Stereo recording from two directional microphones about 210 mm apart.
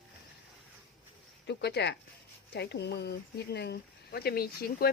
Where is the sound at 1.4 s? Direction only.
55° left (ahead or behind).